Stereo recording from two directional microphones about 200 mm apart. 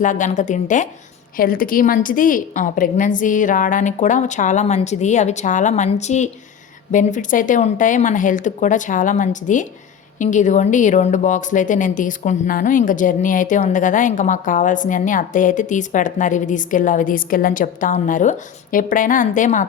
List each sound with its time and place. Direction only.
0.0 s a woman's voice: 40° left (ahead or behind)